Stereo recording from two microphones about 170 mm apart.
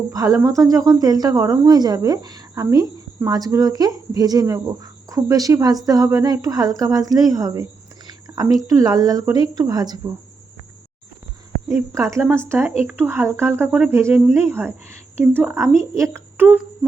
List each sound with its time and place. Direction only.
0.1 s a woman's voice: 20° right (ahead or behind)
11.7 s speech: 15° right (ahead or behind)